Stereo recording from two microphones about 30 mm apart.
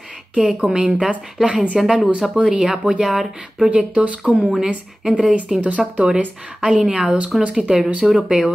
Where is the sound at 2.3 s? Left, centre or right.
Right.